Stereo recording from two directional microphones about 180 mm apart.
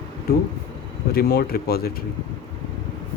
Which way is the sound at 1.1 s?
60° left (ahead or behind).